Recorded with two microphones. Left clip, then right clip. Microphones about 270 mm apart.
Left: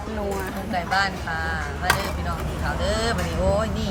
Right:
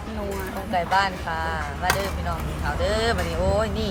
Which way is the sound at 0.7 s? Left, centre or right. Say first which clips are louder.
Right 2 dB; centre.